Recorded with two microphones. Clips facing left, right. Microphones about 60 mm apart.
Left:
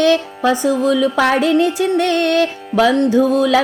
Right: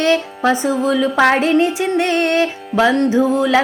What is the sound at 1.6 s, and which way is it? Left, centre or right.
Music, right.